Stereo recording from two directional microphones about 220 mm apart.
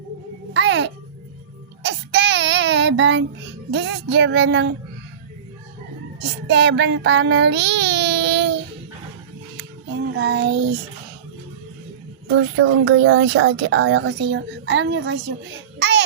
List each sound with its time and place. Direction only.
0.5 s a sound: 55° right (ahead or behind)
3.7 s music: 55° right (ahead or behind)
6.5 s child singing: 55° right (ahead or behind)
10.2 s music: 55° right (ahead or behind)
12.4 s speech: 70° right (ahead or behind)
15.8 s babbling: 50° right (ahead or behind)